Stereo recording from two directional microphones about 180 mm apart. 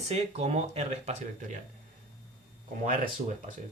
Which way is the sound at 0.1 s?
35° right (ahead or behind).